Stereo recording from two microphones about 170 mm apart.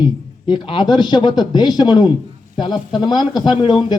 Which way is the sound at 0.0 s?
30° left (ahead or behind).